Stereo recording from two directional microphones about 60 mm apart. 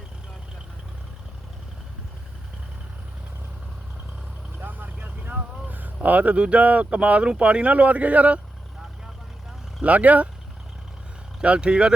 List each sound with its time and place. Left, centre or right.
4.6 s vehicle: right
5.6 s speech: right
9.8 s speech: right
11.3 s speech: centre